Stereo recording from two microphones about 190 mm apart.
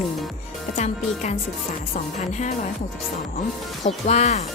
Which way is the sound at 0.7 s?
35° left (ahead or behind).